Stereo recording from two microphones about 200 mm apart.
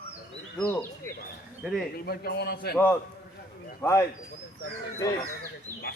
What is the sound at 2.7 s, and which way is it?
A man's voice, 10° left (ahead or behind).